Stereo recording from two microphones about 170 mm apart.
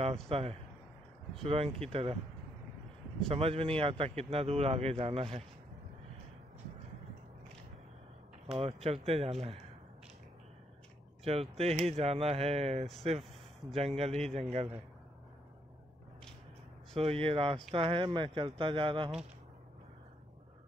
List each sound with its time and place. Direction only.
0.0 s a man's voice: 35° right (ahead or behind)
3.3 s a man's voice: 35° right (ahead or behind)
8.5 s a man's voice: 35° right (ahead or behind)
11.2 s a man's voice: 35° right (ahead or behind)
17.0 s a man's voice: 35° right (ahead or behind)